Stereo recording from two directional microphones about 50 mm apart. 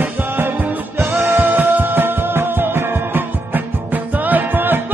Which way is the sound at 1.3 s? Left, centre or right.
Right.